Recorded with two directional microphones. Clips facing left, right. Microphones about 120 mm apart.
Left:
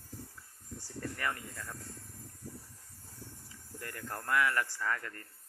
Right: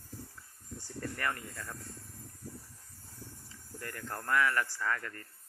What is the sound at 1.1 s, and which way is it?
Speech, 10° left (ahead or behind).